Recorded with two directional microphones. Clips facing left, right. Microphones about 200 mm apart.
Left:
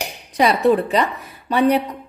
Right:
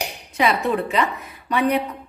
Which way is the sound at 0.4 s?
35° left (ahead or behind).